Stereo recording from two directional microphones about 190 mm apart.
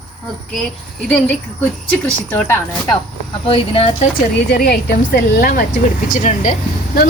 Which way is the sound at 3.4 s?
30° left (ahead or behind).